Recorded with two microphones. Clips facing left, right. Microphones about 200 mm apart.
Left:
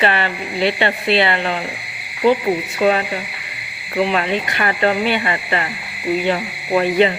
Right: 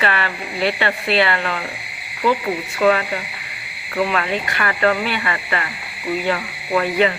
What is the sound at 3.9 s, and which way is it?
Speech, 25° left (ahead or behind).